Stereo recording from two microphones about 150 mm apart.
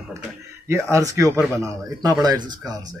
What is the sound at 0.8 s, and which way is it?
A man's voice, 20° right (ahead or behind).